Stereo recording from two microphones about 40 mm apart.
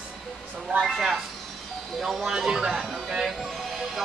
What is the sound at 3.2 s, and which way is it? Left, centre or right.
Speech, centre.